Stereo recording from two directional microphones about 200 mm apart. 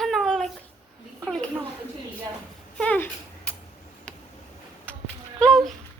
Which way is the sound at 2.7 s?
5° left (ahead or behind).